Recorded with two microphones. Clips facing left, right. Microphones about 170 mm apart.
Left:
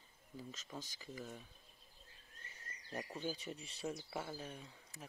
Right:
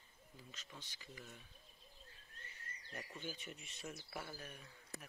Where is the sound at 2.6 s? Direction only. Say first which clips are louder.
Left 6 dB; 40° left (ahead or behind).